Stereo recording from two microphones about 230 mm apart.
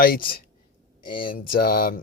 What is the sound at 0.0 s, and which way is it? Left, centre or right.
Speech, left.